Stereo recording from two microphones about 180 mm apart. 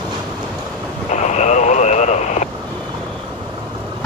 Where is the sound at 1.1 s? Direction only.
40° left (ahead or behind).